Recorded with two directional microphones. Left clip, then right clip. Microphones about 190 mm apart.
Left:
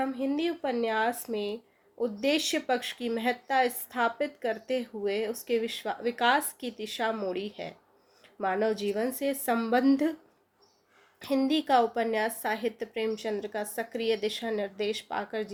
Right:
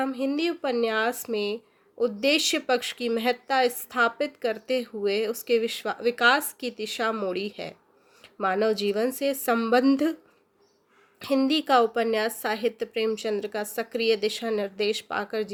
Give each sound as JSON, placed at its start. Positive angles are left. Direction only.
{"t": 0.0, "sound": "speech", "side_deg": -45}
{"t": 11.4, "sound": "speech", "side_deg": -45}